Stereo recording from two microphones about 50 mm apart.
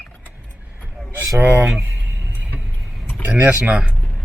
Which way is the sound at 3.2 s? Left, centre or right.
Right.